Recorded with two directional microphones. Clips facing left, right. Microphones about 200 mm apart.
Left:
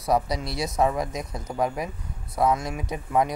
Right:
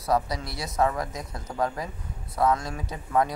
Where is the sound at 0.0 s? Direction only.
15° left (ahead or behind).